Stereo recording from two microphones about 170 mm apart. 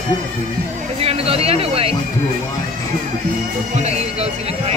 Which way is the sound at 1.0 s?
35° right (ahead or behind).